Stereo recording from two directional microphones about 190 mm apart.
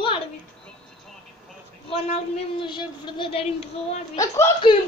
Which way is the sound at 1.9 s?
30° left (ahead or behind).